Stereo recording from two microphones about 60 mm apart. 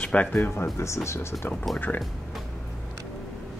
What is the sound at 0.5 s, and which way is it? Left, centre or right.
Speech, left.